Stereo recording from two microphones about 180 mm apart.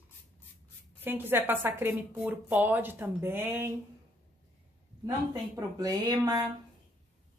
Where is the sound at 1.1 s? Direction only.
10° right (ahead or behind).